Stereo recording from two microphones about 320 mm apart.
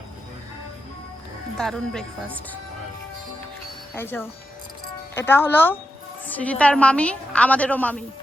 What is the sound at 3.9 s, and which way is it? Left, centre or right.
A woman's voice, centre.